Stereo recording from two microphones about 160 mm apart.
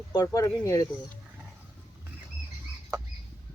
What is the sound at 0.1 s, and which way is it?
Speech, 20° left (ahead or behind).